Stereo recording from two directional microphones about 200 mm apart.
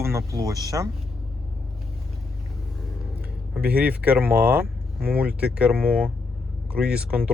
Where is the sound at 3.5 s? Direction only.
10° right (ahead or behind).